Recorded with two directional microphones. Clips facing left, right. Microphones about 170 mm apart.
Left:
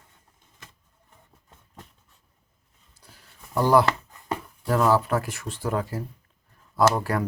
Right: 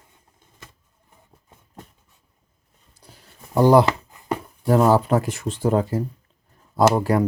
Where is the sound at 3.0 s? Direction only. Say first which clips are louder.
Right 4 dB; 20° right (ahead or behind).